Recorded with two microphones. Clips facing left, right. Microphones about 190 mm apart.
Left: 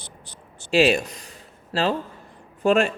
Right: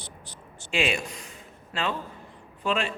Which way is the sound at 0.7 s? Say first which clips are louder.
Left 9 dB; 40° left (ahead or behind).